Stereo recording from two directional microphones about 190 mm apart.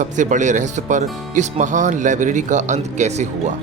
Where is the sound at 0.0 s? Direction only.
40° right (ahead or behind).